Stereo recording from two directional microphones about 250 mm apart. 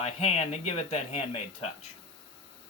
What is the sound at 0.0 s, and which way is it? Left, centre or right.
Speech, left.